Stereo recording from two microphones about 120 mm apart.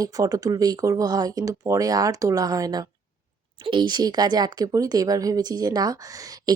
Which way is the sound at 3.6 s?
40° right (ahead or behind).